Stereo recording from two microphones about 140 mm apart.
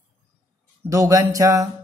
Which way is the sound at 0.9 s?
25° right (ahead or behind).